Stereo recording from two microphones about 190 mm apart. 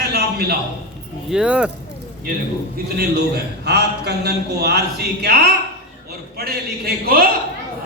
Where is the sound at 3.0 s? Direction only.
55° right (ahead or behind).